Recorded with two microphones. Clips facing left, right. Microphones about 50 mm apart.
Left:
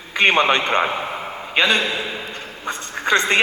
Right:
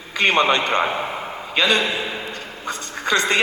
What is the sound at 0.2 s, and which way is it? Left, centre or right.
A man's voice, left.